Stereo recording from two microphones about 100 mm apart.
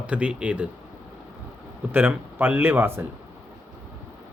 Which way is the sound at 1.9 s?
20° right (ahead or behind).